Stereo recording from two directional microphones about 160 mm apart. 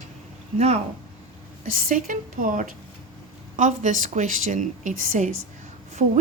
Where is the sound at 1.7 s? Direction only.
55° right (ahead or behind).